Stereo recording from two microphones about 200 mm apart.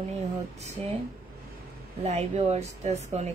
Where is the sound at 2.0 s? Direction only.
35° right (ahead or behind).